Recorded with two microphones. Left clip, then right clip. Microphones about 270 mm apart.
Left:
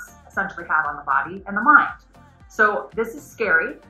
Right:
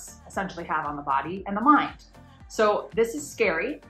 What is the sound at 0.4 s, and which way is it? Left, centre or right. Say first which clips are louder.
A woman's voice: left 7 dB; centre.